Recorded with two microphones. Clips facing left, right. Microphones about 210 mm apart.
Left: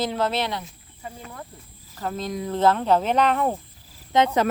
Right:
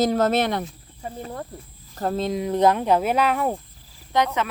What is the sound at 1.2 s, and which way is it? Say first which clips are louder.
Speech: right 7 dB; 35° right (ahead or behind).